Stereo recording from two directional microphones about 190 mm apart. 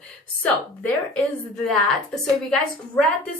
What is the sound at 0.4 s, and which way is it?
A woman's voice, 5° left (ahead or behind).